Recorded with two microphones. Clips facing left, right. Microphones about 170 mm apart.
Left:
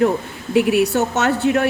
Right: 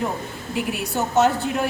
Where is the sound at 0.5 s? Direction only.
75° left (ahead or behind).